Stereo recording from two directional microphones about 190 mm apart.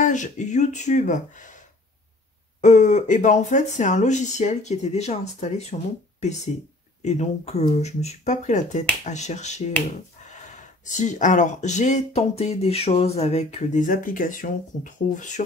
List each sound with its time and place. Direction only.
0.0 s speech: 40° left (ahead or behind)
2.6 s speech: 40° left (ahead or behind)
7.0 s speech: 35° left (ahead or behind)
10.9 s speech: 40° left (ahead or behind)